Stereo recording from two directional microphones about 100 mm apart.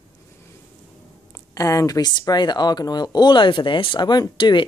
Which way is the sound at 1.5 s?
35° left (ahead or behind).